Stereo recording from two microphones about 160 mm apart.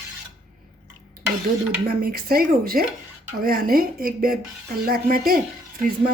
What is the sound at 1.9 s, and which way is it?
Speech, 65° right (ahead or behind).